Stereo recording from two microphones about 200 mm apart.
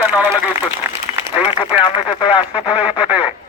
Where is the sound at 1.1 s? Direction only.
30° left (ahead or behind).